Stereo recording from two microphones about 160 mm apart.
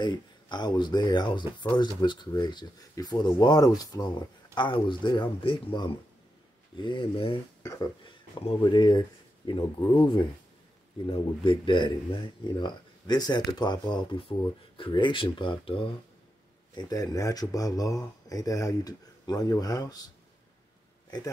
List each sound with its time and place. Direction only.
0.0 s speech: 30° left (ahead or behind)
7.6 s speech: 20° left (ahead or behind)
8.4 s speech: 35° left (ahead or behind)
16.7 s speech: 20° left (ahead or behind)